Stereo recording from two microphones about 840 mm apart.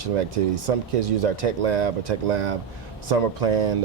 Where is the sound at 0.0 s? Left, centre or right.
Right.